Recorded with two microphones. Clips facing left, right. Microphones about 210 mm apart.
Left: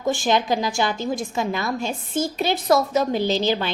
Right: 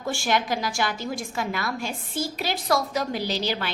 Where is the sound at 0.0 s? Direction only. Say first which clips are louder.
Left 5 dB; 20° left (ahead or behind).